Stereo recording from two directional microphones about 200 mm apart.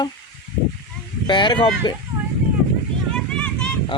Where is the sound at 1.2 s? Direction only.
25° left (ahead or behind).